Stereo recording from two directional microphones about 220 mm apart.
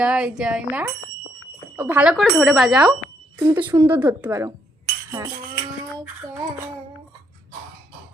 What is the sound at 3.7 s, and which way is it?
Speech, 10° right (ahead or behind).